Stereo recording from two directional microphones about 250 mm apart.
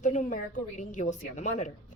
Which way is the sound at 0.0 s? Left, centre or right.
Left.